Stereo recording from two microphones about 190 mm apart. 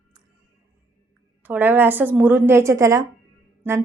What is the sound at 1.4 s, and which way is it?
A woman's voice, 10° right (ahead or behind).